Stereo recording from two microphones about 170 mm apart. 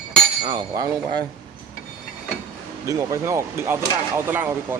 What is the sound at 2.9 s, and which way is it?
Speech, 20° right (ahead or behind).